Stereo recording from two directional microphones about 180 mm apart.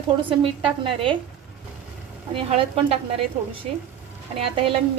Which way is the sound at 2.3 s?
30° right (ahead or behind).